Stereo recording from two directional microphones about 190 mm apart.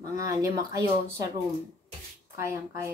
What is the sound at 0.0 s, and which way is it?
Speech, 15° right (ahead or behind).